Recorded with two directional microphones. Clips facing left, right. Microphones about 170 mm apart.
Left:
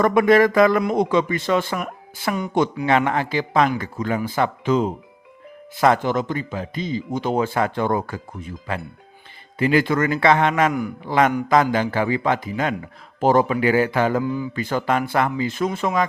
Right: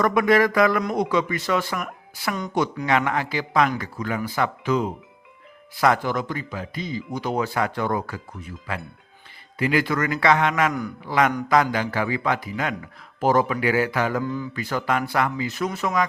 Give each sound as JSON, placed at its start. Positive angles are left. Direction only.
{"t": 0.0, "sound": "speech", "side_deg": 25}
{"t": 14.3, "sound": "speech", "side_deg": 10}
{"t": 14.5, "sound": "speech", "side_deg": 25}